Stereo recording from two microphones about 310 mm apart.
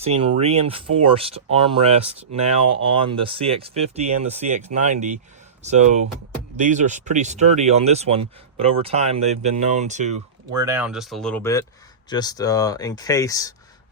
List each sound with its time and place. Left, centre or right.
0.0 s speech: centre
10.6 s speech: centre